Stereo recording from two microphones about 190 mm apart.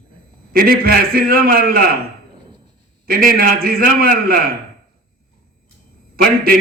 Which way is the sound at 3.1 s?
50° right (ahead or behind).